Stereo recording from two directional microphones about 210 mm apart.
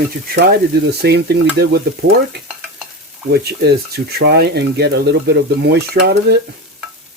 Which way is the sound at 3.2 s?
50° right (ahead or behind).